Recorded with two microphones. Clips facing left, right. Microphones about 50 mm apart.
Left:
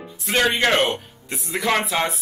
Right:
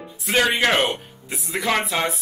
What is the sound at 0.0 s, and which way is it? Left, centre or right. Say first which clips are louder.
Speech: even; centre.